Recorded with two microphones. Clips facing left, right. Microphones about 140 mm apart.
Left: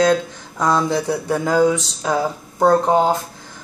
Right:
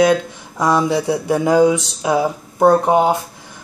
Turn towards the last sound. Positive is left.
turn(degrees=-15)  # may be behind; listen again after turning